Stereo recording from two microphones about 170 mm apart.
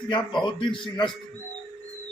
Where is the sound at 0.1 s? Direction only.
30° left (ahead or behind).